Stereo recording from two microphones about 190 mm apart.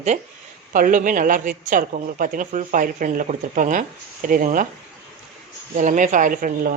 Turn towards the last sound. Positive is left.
turn(degrees=-45)  # may be behind; listen again after turning